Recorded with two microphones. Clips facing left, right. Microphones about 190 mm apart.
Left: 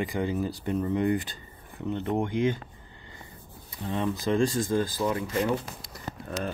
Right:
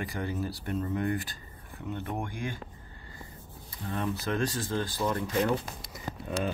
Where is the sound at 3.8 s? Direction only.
20° left (ahead or behind).